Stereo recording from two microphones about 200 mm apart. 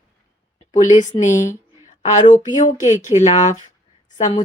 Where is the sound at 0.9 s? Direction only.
35° left (ahead or behind).